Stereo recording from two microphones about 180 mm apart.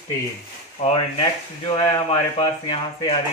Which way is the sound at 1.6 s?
30° left (ahead or behind).